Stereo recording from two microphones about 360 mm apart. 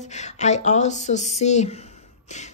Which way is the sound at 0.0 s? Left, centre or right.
Centre.